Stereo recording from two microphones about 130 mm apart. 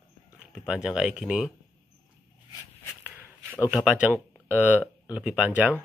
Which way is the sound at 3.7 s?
5° right (ahead or behind).